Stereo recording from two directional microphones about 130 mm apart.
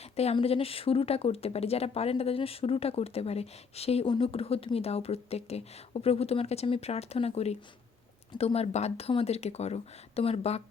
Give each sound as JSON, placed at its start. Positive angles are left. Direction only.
{"t": 0.0, "sound": "a sound", "side_deg": 55}
{"t": 0.3, "sound": "speech", "side_deg": 50}
{"t": 4.0, "sound": "speech", "side_deg": 40}